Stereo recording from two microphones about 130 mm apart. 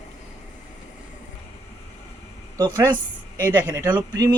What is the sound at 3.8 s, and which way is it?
Speech, 35° right (ahead or behind).